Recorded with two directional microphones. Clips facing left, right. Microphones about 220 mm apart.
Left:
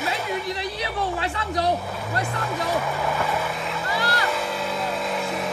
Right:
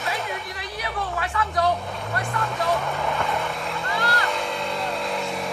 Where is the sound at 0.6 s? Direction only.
25° left (ahead or behind).